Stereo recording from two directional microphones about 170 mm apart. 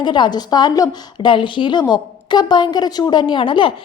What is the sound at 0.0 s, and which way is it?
A woman's voice, 25° left (ahead or behind).